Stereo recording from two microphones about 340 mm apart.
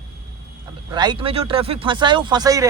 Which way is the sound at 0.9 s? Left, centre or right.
Centre.